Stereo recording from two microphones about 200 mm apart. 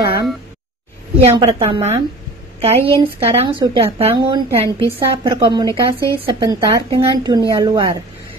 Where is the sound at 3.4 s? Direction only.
25° right (ahead or behind).